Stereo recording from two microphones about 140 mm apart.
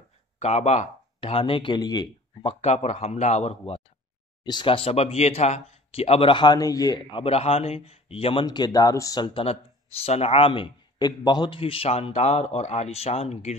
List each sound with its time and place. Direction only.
0.4 s speech: 50° left (ahead or behind); by 2.0 s 30° left (ahead or behind)
2.4 s speech: 50° left (ahead or behind)
4.4 s speech: 35° left (ahead or behind)
8.5 s speech: 30° left (ahead or behind); by 13.6 s 50° left (ahead or behind)